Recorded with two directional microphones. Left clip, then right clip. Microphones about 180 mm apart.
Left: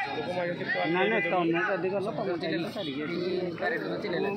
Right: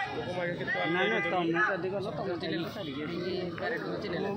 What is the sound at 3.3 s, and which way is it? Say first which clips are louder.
Speech: left 4 dB; 30° left (ahead or behind).